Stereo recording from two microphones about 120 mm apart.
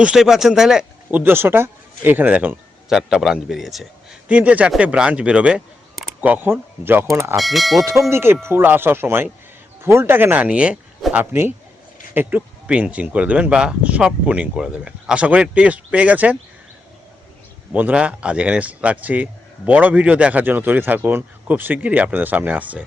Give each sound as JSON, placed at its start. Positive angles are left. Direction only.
{"t": 0.0, "sound": "speech", "side_deg": -5}
{"t": 1.2, "sound": "speech", "side_deg": -15}
{"t": 2.9, "sound": "speech", "side_deg": -5}
{"t": 7.3, "sound": "speech", "side_deg": 0}
{"t": 8.1, "sound": "speech", "side_deg": -20}
{"t": 17.7, "sound": "speech", "side_deg": -10}